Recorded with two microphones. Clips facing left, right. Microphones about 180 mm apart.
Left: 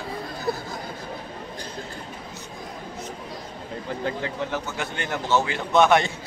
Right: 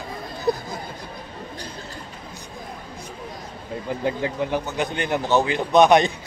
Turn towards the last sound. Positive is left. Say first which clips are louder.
# right 3 dB
turn(degrees=-15)  # may be behind; listen again after turning